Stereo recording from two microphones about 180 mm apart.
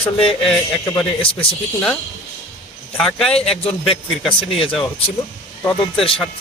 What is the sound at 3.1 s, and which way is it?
Speech, 5° left (ahead or behind).